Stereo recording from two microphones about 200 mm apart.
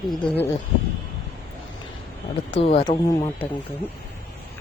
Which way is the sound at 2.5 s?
30° left (ahead or behind).